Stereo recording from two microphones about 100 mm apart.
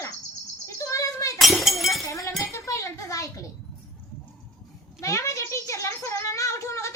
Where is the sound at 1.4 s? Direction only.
Centre (ahead or behind).